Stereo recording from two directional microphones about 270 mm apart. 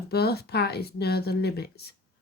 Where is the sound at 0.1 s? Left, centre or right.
Left.